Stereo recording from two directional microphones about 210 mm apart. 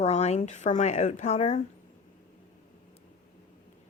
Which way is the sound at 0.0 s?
30° left (ahead or behind).